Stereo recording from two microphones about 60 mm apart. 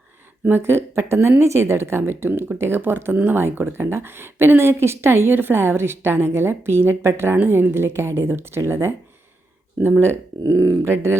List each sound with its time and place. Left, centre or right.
0.4 s a woman's voice: right
10.5 s a woman's voice: right